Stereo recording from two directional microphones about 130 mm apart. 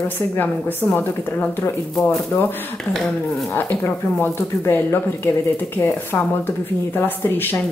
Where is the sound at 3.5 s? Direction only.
15° left (ahead or behind).